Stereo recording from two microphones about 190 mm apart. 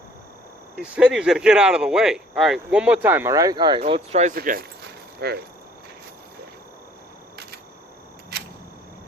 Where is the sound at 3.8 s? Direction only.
35° right (ahead or behind).